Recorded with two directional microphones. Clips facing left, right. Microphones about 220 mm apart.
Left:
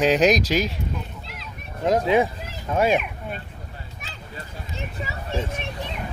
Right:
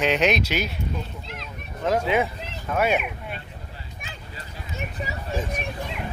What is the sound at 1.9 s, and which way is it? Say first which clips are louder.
Speech: left 3 dB; 30° left (ahead or behind).